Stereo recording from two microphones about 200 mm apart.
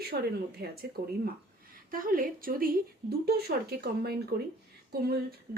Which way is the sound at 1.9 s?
45° right (ahead or behind).